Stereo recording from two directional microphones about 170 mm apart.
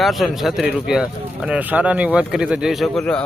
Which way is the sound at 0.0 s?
Centre (ahead or behind).